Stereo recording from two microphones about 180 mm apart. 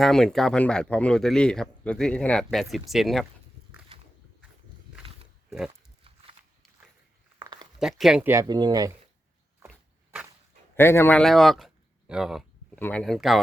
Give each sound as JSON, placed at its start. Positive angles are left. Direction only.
{"t": 0.0, "sound": "speech", "side_deg": 0}
{"t": 5.5, "sound": "speech", "side_deg": -5}
{"t": 7.3, "sound": "a sound", "side_deg": -20}
{"t": 7.8, "sound": "speech", "side_deg": 0}
{"t": 8.3, "sound": "speech", "side_deg": -20}
{"t": 9.6, "sound": "dog", "side_deg": -5}
{"t": 10.8, "sound": "speech", "side_deg": 15}